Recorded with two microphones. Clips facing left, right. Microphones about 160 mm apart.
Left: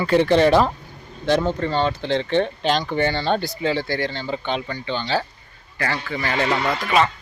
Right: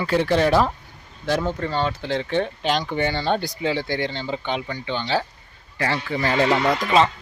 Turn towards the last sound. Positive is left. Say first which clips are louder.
# right 2 dB
turn(degrees=-15)  # may be behind; listen again after turning